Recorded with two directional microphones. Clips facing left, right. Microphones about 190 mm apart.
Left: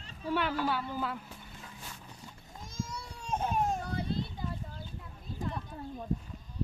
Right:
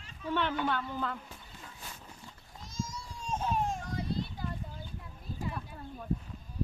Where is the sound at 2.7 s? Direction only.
60° left (ahead or behind).